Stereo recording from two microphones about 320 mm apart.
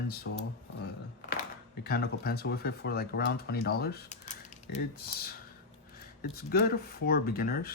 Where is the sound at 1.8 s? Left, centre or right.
Left.